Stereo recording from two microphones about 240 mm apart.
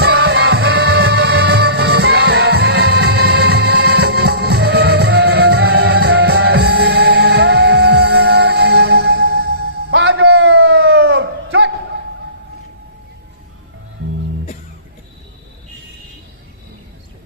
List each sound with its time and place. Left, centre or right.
0.0 s music: right